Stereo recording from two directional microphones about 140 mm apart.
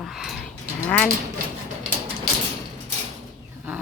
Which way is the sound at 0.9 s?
10° left (ahead or behind).